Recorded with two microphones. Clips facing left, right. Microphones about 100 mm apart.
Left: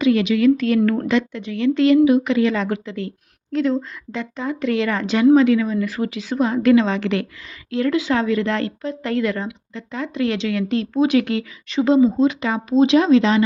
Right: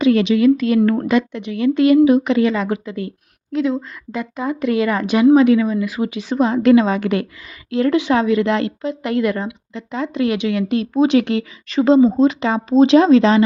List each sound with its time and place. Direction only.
0.0 s speech: 25° right (ahead or behind)
0.4 s speech: 15° right (ahead or behind)
11.9 s speech: 35° right (ahead or behind)